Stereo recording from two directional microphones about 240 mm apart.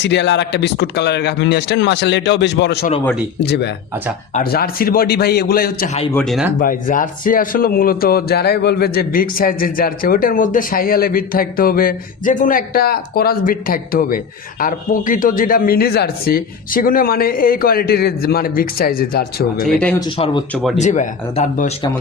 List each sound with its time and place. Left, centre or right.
0.0 s speech: left
6.1 s speech: centre
6.6 s speech: left
19.6 s speech: centre
20.1 s speech: left
20.5 s speech: centre
20.7 s speech: left